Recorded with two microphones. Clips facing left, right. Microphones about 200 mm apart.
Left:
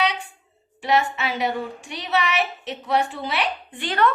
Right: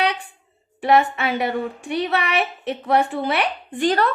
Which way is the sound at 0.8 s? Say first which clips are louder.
Right 4 dB; 55° right (ahead or behind).